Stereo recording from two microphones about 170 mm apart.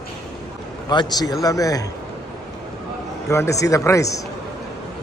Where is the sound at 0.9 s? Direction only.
25° left (ahead or behind).